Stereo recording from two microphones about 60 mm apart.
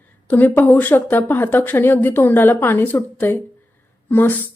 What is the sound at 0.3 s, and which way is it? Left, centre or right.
A woman's voice, left.